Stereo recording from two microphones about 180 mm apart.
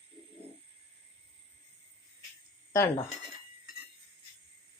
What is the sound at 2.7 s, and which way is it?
Speech, 15° left (ahead or behind).